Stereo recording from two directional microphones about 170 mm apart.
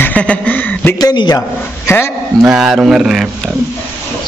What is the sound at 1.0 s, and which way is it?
A man's voice, 25° left (ahead or behind).